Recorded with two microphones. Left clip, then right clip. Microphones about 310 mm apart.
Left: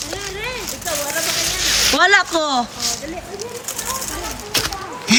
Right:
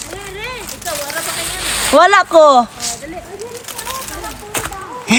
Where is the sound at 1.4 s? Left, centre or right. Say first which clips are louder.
Left 4 dB; centre.